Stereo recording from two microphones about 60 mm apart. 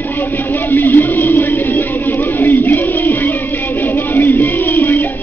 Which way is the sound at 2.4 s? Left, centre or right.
Left.